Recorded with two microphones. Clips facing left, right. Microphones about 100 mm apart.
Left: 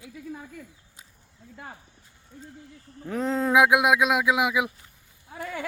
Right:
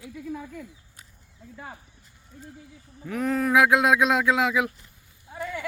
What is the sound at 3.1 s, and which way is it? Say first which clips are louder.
Speech: even; 25° left (ahead or behind).